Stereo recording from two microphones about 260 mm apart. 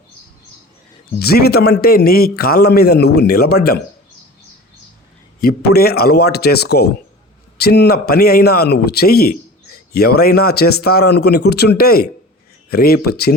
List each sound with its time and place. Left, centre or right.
1.2 s a man's voice: left
5.4 s a man's voice: left